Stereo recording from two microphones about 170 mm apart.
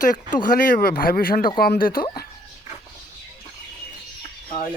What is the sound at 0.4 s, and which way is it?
Speech, 55° left (ahead or behind).